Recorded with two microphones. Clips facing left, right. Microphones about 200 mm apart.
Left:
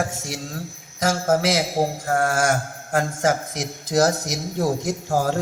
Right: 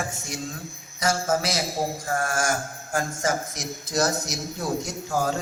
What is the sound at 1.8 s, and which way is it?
A man's voice, 65° left (ahead or behind).